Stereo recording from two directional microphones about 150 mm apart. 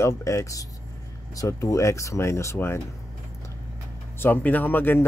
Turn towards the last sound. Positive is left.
turn(degrees=15)  # may be behind; listen again after turning